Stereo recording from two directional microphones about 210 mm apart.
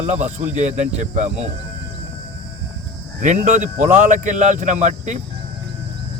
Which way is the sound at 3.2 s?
35° right (ahead or behind).